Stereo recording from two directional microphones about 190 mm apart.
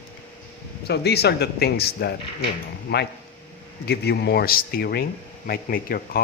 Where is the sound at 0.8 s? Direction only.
60° left (ahead or behind).